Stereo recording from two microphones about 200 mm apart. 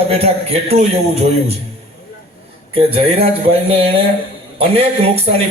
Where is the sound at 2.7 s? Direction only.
30° right (ahead or behind).